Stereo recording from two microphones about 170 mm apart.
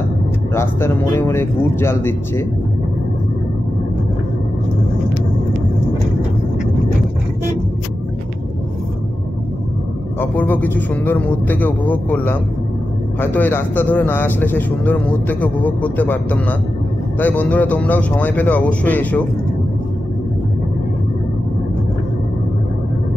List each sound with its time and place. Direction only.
0.6 s a man's voice: 15° left (ahead or behind)
10.2 s a man's voice: 10° left (ahead or behind)